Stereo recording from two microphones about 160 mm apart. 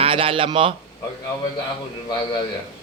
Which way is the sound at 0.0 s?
35° right (ahead or behind).